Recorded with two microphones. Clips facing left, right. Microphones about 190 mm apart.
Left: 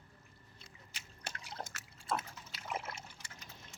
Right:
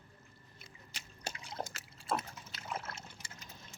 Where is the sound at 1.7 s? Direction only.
35° right (ahead or behind).